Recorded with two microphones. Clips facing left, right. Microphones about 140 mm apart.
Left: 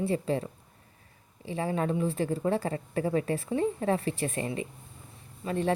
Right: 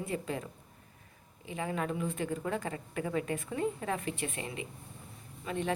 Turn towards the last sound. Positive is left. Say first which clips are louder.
# left 6 dB
turn(degrees=35)  # may be behind; listen again after turning